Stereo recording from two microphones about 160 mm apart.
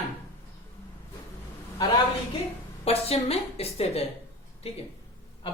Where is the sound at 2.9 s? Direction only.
40° left (ahead or behind).